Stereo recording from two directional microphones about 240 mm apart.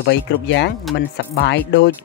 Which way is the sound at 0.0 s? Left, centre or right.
Left.